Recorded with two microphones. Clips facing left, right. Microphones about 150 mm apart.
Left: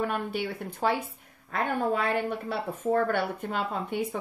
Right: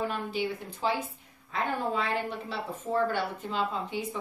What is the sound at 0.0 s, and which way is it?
Speech, 60° left (ahead or behind).